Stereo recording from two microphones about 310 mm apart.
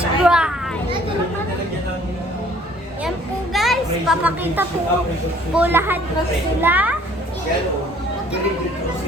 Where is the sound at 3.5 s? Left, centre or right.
Centre.